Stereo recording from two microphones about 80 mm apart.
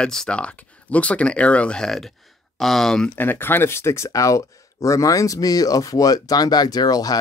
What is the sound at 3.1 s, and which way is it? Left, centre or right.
Speech, left.